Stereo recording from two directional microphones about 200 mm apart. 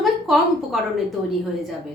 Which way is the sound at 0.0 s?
Centre (ahead or behind).